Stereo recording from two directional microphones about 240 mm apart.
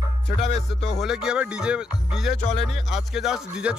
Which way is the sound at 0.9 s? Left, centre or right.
Centre.